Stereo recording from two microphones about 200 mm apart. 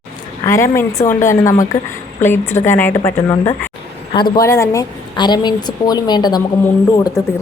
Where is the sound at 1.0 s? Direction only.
40° left (ahead or behind).